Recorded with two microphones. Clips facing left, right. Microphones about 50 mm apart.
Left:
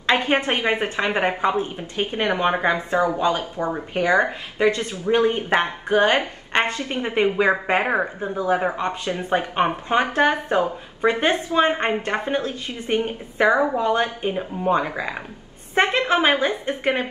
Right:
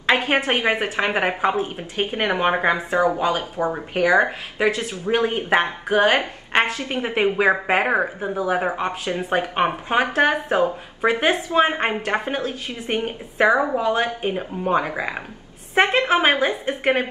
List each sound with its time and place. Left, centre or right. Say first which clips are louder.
0.1 s a woman's voice: even; centre
0.5 s a woman's voice: right 1 dB; right
1.1 s a woman's voice: left 1 dB; centre